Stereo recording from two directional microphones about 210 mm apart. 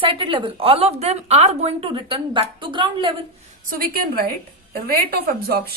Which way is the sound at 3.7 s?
45° right (ahead or behind).